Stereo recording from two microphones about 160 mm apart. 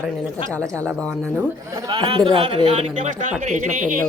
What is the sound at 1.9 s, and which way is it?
Speech, 30° right (ahead or behind).